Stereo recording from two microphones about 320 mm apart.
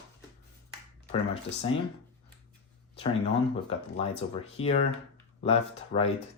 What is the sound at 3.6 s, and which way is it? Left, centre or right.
Speech, centre.